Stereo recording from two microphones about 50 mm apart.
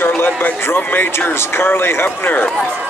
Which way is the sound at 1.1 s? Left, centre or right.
Left.